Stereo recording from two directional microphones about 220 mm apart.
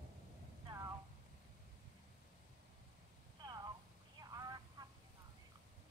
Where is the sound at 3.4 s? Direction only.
20° right (ahead or behind).